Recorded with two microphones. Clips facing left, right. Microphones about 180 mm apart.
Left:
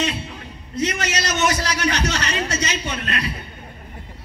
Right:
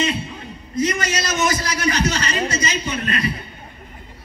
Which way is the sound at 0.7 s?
70° left (ahead or behind).